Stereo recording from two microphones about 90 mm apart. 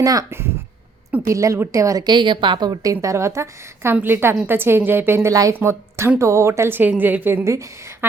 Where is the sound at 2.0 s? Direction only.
60° right (ahead or behind); by 7.4 s 20° right (ahead or behind).